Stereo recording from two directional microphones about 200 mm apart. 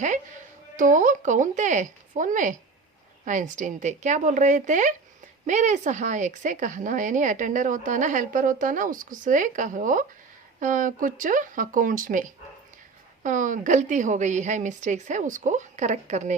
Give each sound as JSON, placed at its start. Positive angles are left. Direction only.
{"t": 0.8, "sound": "speech", "side_deg": -40}
{"t": 13.2, "sound": "speech", "side_deg": -40}